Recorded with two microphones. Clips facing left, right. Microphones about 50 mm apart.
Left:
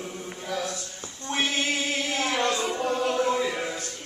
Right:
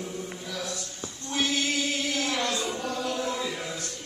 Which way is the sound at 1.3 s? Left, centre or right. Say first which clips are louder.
Left 1 dB; left.